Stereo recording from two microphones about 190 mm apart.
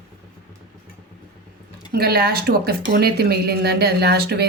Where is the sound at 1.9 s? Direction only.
55° right (ahead or behind).